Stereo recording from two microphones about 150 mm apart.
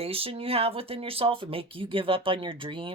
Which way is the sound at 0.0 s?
40° right (ahead or behind).